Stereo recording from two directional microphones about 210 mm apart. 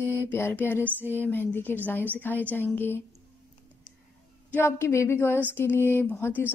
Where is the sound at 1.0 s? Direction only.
10° right (ahead or behind).